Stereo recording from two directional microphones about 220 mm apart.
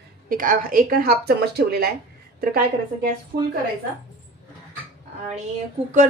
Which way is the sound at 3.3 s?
25° right (ahead or behind).